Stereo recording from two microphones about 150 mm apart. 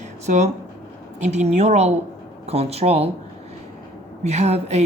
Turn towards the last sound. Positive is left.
turn(degrees=-45)  # may be behind; listen again after turning